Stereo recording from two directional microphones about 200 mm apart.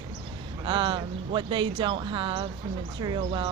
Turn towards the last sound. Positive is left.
turn(degrees=-25)  # may be behind; listen again after turning